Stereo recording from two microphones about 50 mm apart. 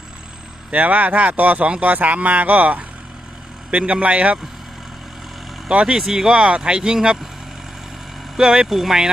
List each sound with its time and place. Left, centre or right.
0.7 s speech: right
3.7 s a man's voice: right
5.6 s speech: centre
8.4 s speech: centre